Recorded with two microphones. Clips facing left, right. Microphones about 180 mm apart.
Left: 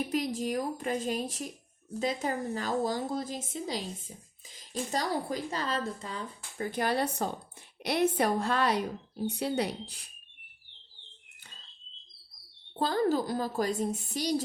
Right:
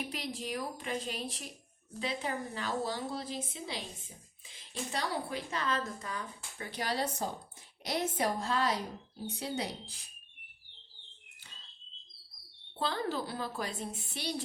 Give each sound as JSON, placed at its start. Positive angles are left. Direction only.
{"t": 0.1, "sound": "a woman's voice", "side_deg": 45}
{"t": 6.6, "sound": "a woman's voice", "side_deg": 50}
{"t": 12.8, "sound": "speech", "side_deg": 45}